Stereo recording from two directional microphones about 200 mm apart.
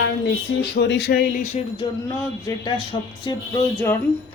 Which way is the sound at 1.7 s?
20° left (ahead or behind).